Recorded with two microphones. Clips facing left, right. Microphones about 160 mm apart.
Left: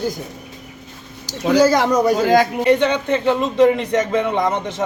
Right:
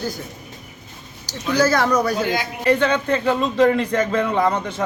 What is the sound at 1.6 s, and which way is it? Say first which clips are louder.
A man's voice: left 3 dB; 15° left (ahead or behind).